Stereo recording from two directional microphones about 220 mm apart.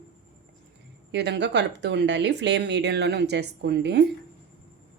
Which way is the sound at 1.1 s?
50° right (ahead or behind).